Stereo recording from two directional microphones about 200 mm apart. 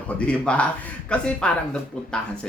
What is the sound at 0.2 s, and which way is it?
A man's voice, 5° left (ahead or behind).